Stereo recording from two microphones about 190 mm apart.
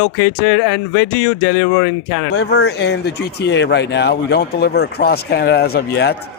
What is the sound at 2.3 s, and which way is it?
Speech, 60° left (ahead or behind).